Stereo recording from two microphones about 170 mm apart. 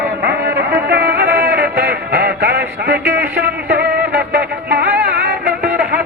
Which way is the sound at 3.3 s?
65° right (ahead or behind).